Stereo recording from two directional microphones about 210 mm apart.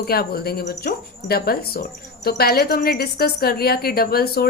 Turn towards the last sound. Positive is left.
turn(degrees=45)  # may be behind; listen again after turning